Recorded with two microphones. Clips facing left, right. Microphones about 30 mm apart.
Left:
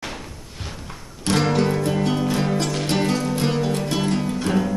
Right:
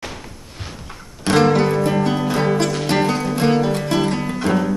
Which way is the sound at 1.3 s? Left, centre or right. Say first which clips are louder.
Right 5 dB; centre.